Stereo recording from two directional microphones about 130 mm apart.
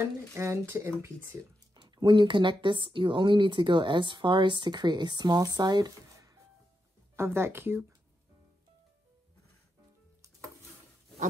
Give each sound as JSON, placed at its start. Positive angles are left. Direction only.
{"t": 0.3, "sound": "speech", "side_deg": -20}
{"t": 1.8, "sound": "speech", "side_deg": -35}
{"t": 7.2, "sound": "speech", "side_deg": -20}